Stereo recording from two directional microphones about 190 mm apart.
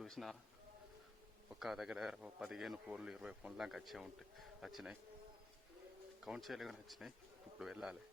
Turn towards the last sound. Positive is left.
turn(degrees=-5)  # may be behind; listen again after turning